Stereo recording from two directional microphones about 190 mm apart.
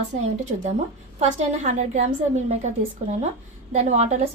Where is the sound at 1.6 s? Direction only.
40° right (ahead or behind).